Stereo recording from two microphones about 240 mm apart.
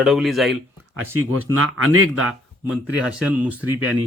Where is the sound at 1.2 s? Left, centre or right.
Right.